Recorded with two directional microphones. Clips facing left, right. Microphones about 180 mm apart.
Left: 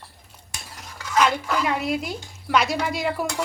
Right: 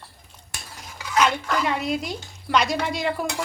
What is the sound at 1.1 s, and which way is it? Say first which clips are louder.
A woman's voice: left 1 dB; 5° left (ahead or behind).